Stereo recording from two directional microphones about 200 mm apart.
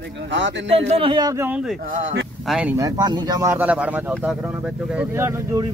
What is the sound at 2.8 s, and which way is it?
Speech, 20° right (ahead or behind).